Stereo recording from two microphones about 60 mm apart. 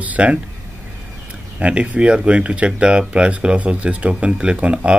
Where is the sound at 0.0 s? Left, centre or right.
Right.